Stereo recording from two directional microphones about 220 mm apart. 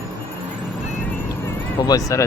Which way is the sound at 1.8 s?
15° left (ahead or behind).